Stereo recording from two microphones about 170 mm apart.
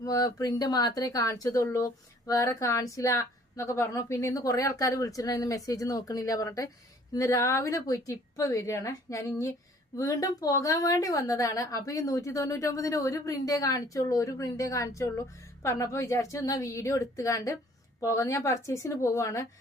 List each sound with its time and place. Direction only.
0.0 s a woman's voice: 20° left (ahead or behind)